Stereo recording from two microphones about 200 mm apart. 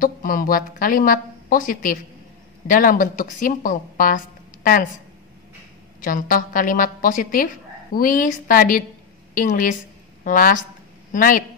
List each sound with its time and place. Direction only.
0.0 s a woman's voice: 45° left (ahead or behind)
5.9 s a woman's voice: 45° left (ahead or behind)